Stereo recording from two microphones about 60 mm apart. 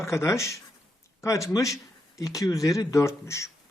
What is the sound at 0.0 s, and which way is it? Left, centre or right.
Speech, left.